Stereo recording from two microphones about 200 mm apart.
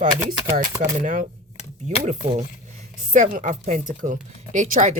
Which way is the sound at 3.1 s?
40° right (ahead or behind).